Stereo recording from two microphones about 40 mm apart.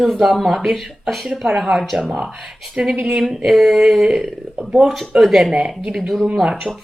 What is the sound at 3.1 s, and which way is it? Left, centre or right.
Speech, centre.